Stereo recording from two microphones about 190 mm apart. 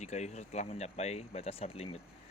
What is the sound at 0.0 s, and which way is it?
Speech, 35° left (ahead or behind).